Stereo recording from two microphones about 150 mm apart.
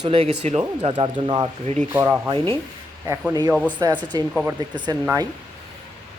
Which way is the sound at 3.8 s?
25° right (ahead or behind).